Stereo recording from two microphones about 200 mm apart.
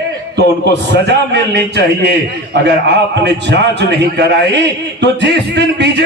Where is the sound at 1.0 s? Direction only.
60° right (ahead or behind).